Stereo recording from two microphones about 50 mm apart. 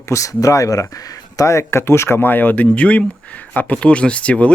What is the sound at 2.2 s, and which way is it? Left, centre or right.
Speech, left.